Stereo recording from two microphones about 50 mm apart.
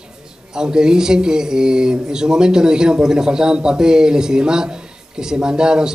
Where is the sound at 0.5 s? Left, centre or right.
Centre.